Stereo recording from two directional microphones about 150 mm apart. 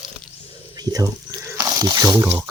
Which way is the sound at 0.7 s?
25° right (ahead or behind).